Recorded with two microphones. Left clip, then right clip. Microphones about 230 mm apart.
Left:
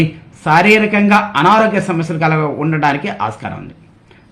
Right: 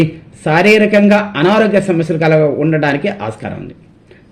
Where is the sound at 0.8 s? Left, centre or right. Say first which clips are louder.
Right 2 dB; left.